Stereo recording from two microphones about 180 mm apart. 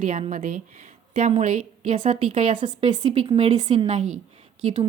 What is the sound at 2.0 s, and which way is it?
Speech, 30° right (ahead or behind).